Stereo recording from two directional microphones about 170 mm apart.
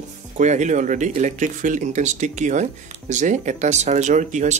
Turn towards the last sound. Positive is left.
turn(degrees=-45)  # may be behind; listen again after turning